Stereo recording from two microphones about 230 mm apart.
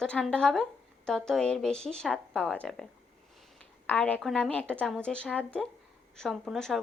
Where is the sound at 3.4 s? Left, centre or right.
Centre.